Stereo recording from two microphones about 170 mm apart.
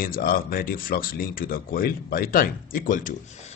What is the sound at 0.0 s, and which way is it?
Speech, 60° left (ahead or behind).